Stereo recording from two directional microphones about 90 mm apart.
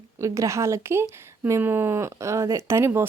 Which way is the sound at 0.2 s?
35° right (ahead or behind).